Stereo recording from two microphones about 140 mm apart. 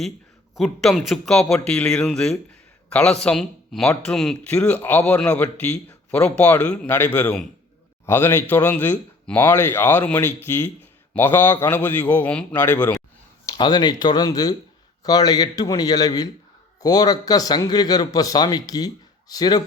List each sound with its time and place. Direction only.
0.5 s speech: centre (ahead or behind); by 13.0 s 15° left (ahead or behind)
13.5 s a man's voice: 30° left (ahead or behind)